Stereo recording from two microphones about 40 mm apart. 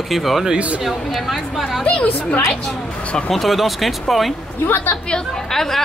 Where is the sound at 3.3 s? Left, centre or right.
Centre.